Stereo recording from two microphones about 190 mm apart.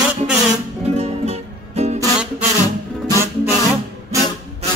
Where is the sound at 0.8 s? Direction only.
35° right (ahead or behind).